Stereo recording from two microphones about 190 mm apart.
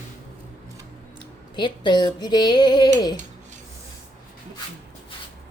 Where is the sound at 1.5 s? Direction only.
25° left (ahead or behind).